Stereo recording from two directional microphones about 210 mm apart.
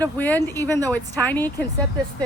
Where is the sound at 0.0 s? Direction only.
10° left (ahead or behind).